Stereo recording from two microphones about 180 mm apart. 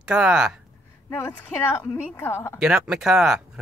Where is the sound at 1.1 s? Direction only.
10° left (ahead or behind).